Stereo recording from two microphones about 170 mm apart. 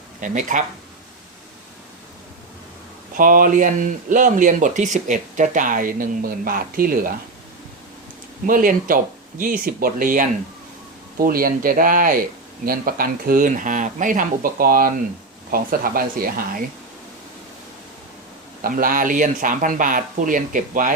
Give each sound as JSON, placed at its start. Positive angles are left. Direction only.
{"t": 0.2, "sound": "speech", "side_deg": -50}
{"t": 3.2, "sound": "speech", "side_deg": -55}
{"t": 8.4, "sound": "speech", "side_deg": -55}
{"t": 18.6, "sound": "speech", "side_deg": -55}